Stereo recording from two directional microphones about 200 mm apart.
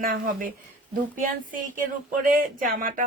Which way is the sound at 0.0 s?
45° right (ahead or behind).